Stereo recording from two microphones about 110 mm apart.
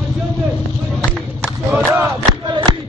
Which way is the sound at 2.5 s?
45° right (ahead or behind).